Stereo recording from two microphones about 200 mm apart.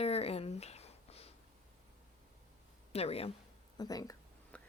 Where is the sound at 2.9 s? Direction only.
30° left (ahead or behind).